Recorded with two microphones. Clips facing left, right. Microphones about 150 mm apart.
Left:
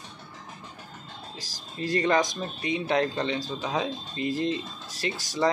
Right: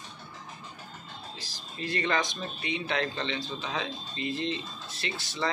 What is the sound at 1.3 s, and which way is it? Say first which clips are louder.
Speech: left 7 dB; 40° left (ahead or behind).